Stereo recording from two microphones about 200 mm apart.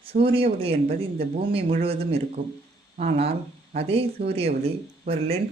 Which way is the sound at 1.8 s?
30° right (ahead or behind).